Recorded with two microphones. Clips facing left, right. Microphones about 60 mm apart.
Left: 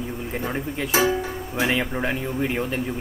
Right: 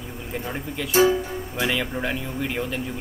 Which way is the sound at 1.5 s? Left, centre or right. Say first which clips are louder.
Left 2 dB; centre.